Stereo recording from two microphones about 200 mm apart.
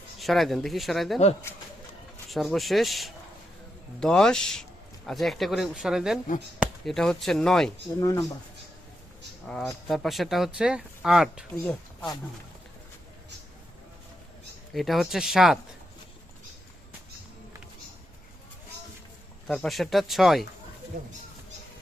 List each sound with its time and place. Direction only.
0.2 s speech: centre (ahead or behind)
2.3 s speech: centre (ahead or behind)
7.9 s speech: 15° left (ahead or behind)
9.5 s speech: 5° left (ahead or behind)
11.5 s speech: 10° left (ahead or behind)
14.7 s speech: centre (ahead or behind)
19.5 s speech: centre (ahead or behind)
20.9 s speech: 45° right (ahead or behind)